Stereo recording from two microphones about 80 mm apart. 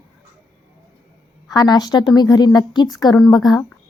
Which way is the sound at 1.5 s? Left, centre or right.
Left.